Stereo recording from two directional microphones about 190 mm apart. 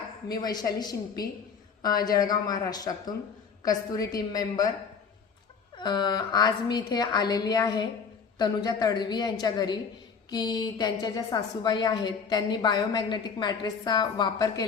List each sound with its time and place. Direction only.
0.3 s a woman's voice: 20° left (ahead or behind)
5.7 s a woman's voice: 20° left (ahead or behind)